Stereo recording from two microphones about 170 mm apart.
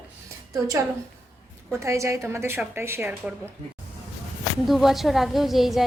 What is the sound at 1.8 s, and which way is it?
A woman's voice, 15° right (ahead or behind).